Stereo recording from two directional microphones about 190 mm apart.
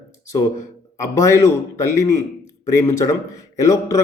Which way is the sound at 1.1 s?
15° left (ahead or behind).